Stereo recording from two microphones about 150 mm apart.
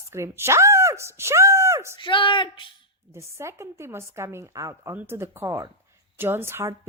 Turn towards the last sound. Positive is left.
turn(degrees=-15)  # may be behind; listen again after turning